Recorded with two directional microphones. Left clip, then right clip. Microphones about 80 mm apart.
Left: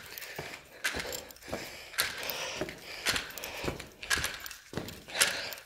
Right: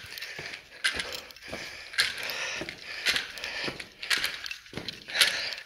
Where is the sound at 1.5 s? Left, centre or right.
Left.